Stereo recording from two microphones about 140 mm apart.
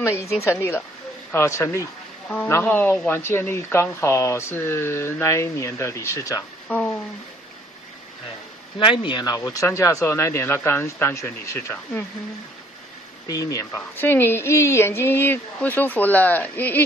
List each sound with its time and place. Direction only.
0.0 s speech: 20° left (ahead or behind)
2.2 s speech: 10° left (ahead or behind)
6.7 s speech: 10° left (ahead or behind)
8.7 s speech: 35° left (ahead or behind); by 12.0 s 15° left (ahead or behind)
13.3 s speech: 25° left (ahead or behind)